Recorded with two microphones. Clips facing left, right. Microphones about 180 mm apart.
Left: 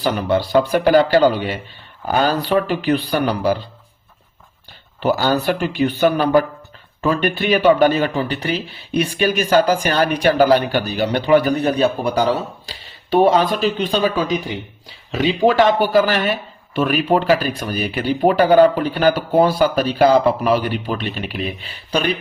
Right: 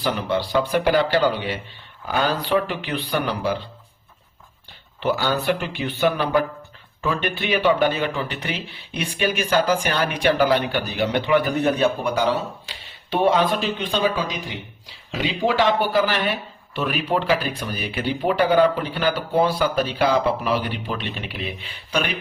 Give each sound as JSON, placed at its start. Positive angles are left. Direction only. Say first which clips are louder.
{"t": 0.0, "sound": "a man's voice", "louder": "left 5 dB", "side_deg": 45}
{"t": 4.9, "sound": "a man's voice", "louder": "left 5 dB", "side_deg": 40}